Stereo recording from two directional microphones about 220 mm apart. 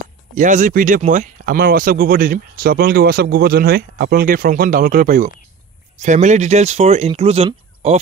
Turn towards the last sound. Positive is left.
turn(degrees=-30)  # may be behind; listen again after turning